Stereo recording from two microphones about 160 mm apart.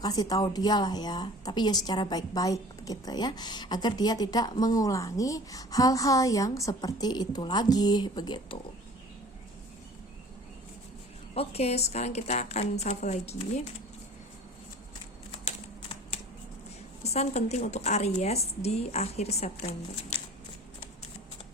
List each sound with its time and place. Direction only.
0.0 s a woman's voice: 25° left (ahead or behind)
11.3 s a woman's voice: 40° left (ahead or behind)
15.3 s typing: 40° left (ahead or behind)
17.0 s a woman's voice: 40° left (ahead or behind)